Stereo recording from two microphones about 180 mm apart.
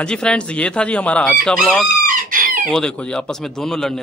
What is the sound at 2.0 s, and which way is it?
Chicken, 50° right (ahead or behind).